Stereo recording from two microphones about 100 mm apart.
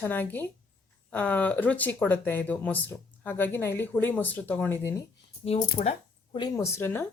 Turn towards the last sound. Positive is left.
turn(degrees=25)  # may be behind; listen again after turning